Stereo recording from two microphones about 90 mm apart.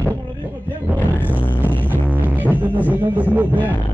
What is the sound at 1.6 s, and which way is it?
Music, 20° right (ahead or behind).